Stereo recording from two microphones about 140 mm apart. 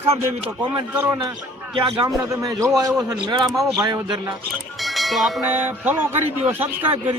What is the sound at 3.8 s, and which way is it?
Speech, 20° right (ahead or behind).